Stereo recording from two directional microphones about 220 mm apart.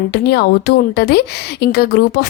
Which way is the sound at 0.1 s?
50° left (ahead or behind).